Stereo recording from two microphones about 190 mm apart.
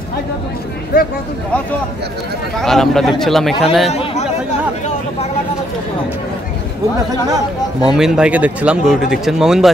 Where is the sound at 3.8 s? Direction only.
35° left (ahead or behind).